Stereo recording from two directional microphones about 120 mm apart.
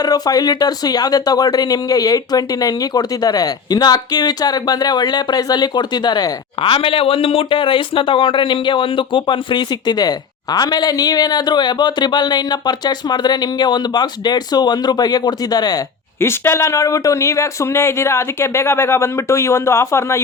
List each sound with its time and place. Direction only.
0.0 s speech: 30° left (ahead or behind)
16.2 s speech: 20° left (ahead or behind)